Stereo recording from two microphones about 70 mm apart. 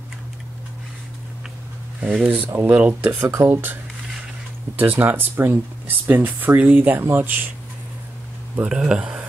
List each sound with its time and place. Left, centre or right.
2.0 s speech: centre
4.7 s speech: right
8.6 s speech: centre